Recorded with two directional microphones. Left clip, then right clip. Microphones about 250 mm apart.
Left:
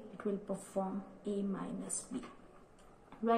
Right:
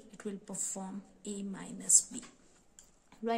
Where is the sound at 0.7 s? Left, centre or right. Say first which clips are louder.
Left 7 dB; right.